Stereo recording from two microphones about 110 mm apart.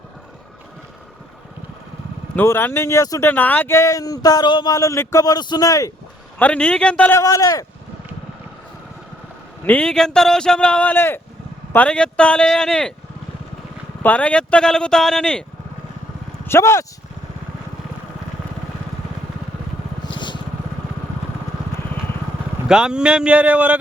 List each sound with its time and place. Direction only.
2.3 s speech: 20° left (ahead or behind)
3.2 s speech: 15° left (ahead or behind); by 4.7 s 40° left (ahead or behind)
4.7 s speech: 30° left (ahead or behind)
6.4 s a man's voice: 10° left (ahead or behind)
7.2 s speech: 30° left (ahead or behind)
9.6 s a man's voice: 10° left (ahead or behind)
14.0 s a man's voice: 15° left (ahead or behind)
16.5 s speech: 25° left (ahead or behind)
20.1 s vehicle: 45° left (ahead or behind)
22.7 s speech: 5° right (ahead or behind)